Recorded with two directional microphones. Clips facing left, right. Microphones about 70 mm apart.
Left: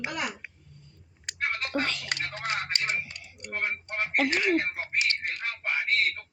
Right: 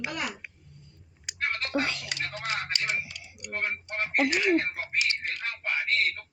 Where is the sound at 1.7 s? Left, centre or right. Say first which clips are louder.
Right 2 dB; centre.